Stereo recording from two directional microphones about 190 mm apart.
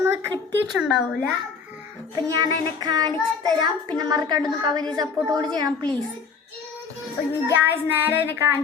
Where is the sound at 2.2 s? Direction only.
20° right (ahead or behind).